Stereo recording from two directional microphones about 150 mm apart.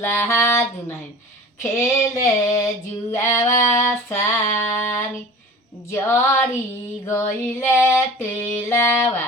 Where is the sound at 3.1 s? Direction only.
15° left (ahead or behind).